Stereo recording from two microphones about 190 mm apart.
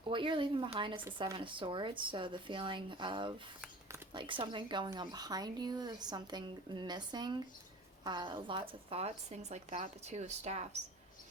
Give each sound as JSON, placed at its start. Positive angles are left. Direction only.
{"t": 0.1, "sound": "speech", "side_deg": -25}